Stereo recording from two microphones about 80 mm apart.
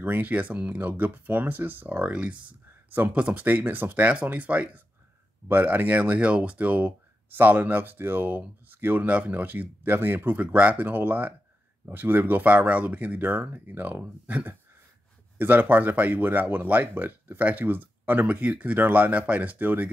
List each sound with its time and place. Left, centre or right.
0.0 s speech: right